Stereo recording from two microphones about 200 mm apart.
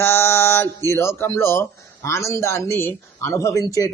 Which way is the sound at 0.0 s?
10° left (ahead or behind).